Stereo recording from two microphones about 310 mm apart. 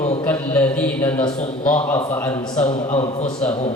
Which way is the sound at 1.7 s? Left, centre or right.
Centre.